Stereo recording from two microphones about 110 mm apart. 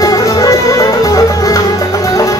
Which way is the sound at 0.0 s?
30° left (ahead or behind).